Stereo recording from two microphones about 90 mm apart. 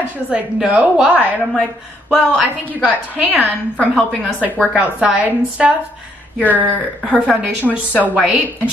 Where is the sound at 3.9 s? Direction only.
10° right (ahead or behind).